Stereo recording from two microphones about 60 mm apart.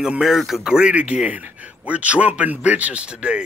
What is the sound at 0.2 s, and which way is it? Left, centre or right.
A man's voice, centre.